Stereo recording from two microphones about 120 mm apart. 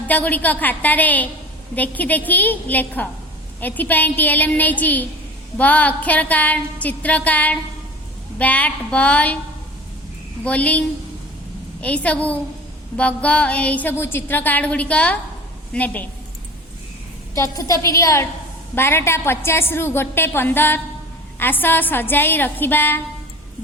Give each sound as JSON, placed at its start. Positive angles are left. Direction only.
{"t": 0.1, "sound": "a woman's voice", "side_deg": 15}
{"t": 10.4, "sound": "a woman's voice", "side_deg": 10}
{"t": 17.3, "sound": "a woman's voice", "side_deg": 25}